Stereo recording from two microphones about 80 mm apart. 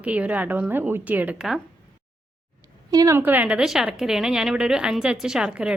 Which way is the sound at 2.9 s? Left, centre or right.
Right.